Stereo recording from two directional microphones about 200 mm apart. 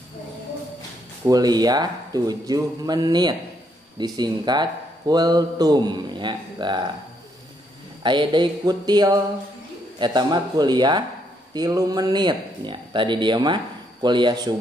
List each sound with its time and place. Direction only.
1.2 s a man's voice: 20° right (ahead or behind)
8.0 s a man's voice: 25° right (ahead or behind)